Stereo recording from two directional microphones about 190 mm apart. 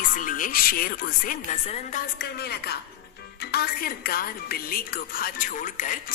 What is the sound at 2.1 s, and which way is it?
A woman's voice, 55° left (ahead or behind).